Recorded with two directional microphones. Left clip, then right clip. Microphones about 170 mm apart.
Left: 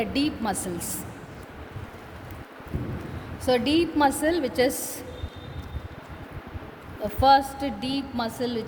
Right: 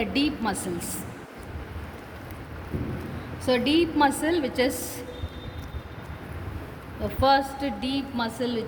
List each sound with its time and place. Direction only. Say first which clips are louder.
0.0 s a woman's voice: right 1 dB; 65° left (ahead or behind)
3.4 s a woman's voice: even; 65° left (ahead or behind)
7.2 s a woman's voice: left 3 dB; 80° left